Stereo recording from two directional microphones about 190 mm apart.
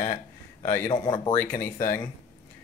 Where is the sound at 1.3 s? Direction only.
10° left (ahead or behind).